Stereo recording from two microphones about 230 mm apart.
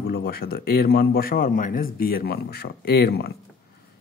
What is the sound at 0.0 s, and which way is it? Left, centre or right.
Speech, left.